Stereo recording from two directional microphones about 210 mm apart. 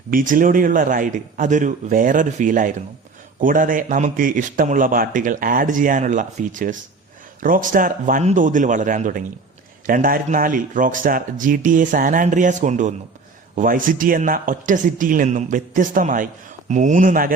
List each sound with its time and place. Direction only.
0.1 s a man's voice: 40° right (ahead or behind)